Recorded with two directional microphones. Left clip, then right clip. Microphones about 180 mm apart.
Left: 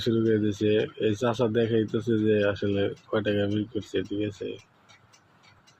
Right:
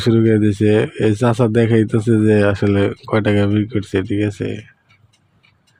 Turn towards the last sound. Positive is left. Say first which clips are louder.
# right 10 dB
turn(degrees=-55)  # may be behind; listen again after turning